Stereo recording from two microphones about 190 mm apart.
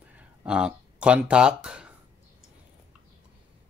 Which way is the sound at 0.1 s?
5° right (ahead or behind).